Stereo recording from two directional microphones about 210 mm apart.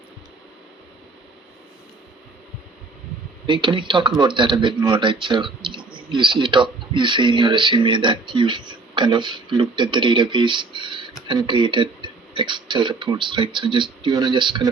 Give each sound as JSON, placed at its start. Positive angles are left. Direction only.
{"t": 3.4, "sound": "speech", "side_deg": -25}